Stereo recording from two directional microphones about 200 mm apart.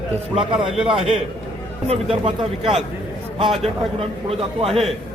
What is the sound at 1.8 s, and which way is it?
A man's voice, 30° right (ahead or behind).